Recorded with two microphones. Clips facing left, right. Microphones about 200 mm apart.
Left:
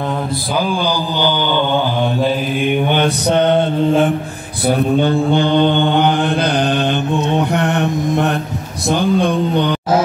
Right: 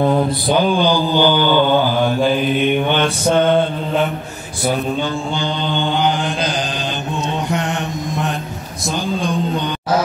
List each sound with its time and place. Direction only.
1.1 s mantra: 15° right (ahead or behind)
2.6 s mantra: 15° left (ahead or behind)
4.7 s mantra: 60° left (ahead or behind)